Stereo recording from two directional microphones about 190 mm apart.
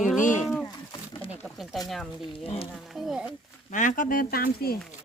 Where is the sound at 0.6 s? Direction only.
25° left (ahead or behind).